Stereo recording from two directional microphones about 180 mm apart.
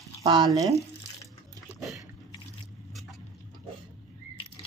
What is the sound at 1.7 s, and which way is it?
Dog, centre (ahead or behind).